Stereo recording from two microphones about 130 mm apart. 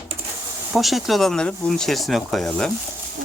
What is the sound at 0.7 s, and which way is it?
Speech, centre (ahead or behind).